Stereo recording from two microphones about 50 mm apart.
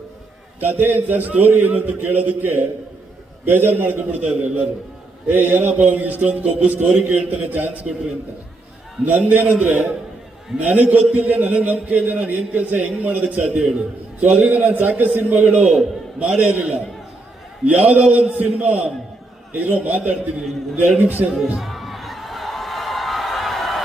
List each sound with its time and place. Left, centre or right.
0.6 s a man's voice: right
4.3 s a man's voice: centre
5.3 s a man's voice: right
9.0 s a man's voice: right
9.6 s a man's voice: right
10.6 s a man's voice: right
15.6 s a man's voice: right
21.3 s a sound: centre